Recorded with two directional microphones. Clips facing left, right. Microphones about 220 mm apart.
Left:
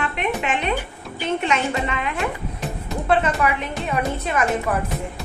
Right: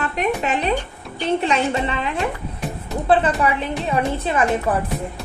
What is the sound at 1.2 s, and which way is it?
A woman's voice, 35° right (ahead or behind).